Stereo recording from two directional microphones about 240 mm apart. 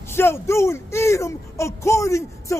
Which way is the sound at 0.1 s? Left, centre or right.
Centre.